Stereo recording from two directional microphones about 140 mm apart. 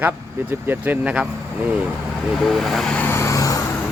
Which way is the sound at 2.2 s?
Centre (ahead or behind).